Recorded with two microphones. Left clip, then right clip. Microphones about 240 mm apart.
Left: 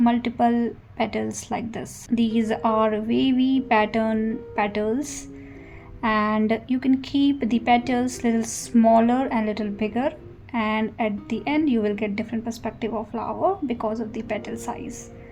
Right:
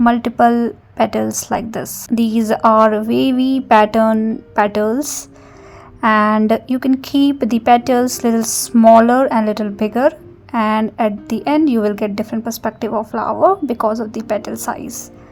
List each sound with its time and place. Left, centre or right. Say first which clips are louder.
0.0 s a woman's voice: right 9 dB; right